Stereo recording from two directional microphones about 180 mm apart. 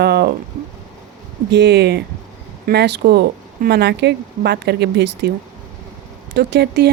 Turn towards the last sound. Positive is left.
turn(degrees=-65)  # may be behind; listen again after turning